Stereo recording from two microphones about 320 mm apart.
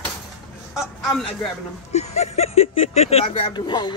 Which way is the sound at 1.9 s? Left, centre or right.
Left.